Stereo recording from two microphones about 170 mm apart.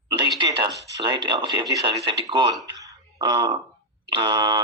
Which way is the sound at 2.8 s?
20° right (ahead or behind).